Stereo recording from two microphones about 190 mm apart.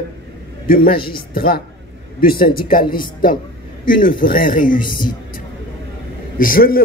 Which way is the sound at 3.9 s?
45° left (ahead or behind).